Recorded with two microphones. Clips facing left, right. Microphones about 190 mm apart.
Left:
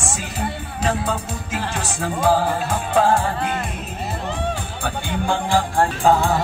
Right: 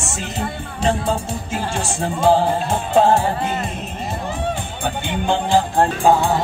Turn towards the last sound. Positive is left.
turn(degrees=-15)  # may be behind; listen again after turning